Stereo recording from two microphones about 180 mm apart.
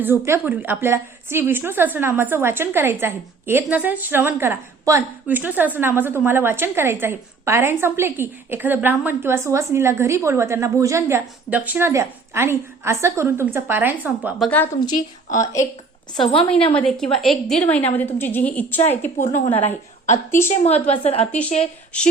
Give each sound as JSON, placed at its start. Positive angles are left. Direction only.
{"t": 0.0, "sound": "a woman's voice", "side_deg": -10}
{"t": 14.4, "sound": "a woman's voice", "side_deg": 10}
{"t": 15.3, "sound": "a woman's voice", "side_deg": 45}
{"t": 16.3, "sound": "a woman's voice", "side_deg": 30}
{"t": 16.7, "sound": "a woman's voice", "side_deg": 0}
{"t": 19.2, "sound": "a woman's voice", "side_deg": 40}